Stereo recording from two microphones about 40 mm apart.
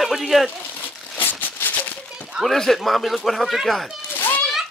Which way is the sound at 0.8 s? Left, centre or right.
Left.